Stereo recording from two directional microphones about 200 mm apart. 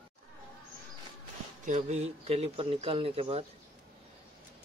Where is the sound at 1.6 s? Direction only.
35° right (ahead or behind).